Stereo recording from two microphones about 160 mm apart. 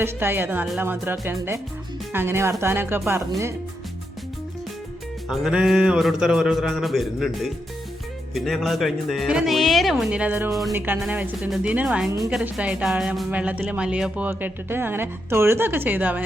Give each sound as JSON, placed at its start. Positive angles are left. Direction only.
{"t": 0.0, "sound": "speech", "side_deg": -15}
{"t": 5.3, "sound": "a woman's voice", "side_deg": -5}